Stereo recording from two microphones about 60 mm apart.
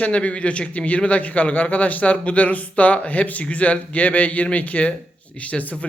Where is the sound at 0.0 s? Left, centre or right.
Centre.